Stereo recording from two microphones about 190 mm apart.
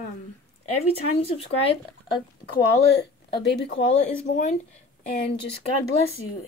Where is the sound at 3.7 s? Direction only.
40° left (ahead or behind).